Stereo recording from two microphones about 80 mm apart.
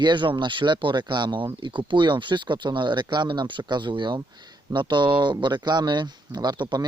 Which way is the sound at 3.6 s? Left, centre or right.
Right.